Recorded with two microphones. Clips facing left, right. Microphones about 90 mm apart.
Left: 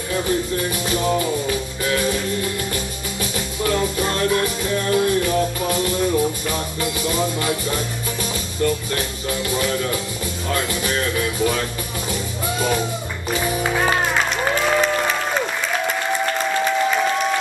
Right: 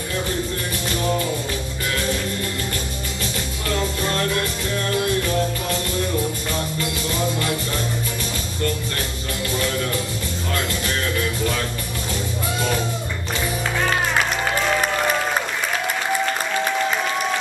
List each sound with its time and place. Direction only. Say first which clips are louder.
0.8 s music: left 1 dB; 5° left (ahead or behind)
3.6 s music: left 4 dB; 10° left (ahead or behind)
9.5 s music: left 1 dB; 5° left (ahead or behind)
13.3 s music: left 4 dB; 10° left (ahead or behind)